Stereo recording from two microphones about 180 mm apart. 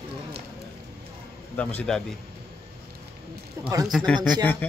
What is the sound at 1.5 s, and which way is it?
Speech, 10° left (ahead or behind).